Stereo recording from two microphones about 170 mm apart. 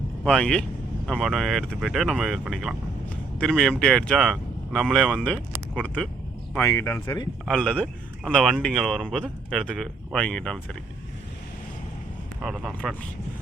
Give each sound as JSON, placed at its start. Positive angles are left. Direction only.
{"t": 0.3, "sound": "speech", "side_deg": 5}
{"t": 7.4, "sound": "speech", "side_deg": 5}
{"t": 12.4, "sound": "speech", "side_deg": -5}